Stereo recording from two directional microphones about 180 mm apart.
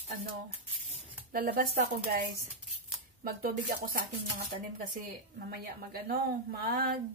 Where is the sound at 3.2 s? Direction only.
50° right (ahead or behind).